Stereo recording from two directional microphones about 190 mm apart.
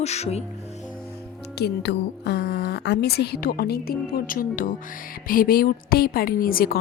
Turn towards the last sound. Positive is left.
turn(degrees=50)  # may be behind; listen again after turning